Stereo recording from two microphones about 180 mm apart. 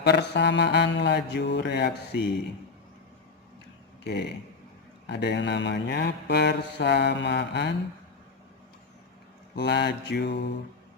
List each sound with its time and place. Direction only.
0.0 s mantra: 70° left (ahead or behind)
4.0 s speech: 65° left (ahead or behind)
5.0 s mantra: 70° left (ahead or behind)
9.6 s mantra: 65° left (ahead or behind)